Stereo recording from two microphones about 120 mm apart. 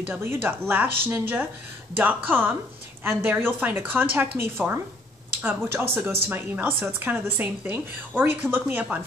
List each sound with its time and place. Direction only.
0.0 s a woman's voice: 20° right (ahead or behind)
5.3 s a sound: 15° right (ahead or behind)
5.7 s a woman's voice: 20° right (ahead or behind)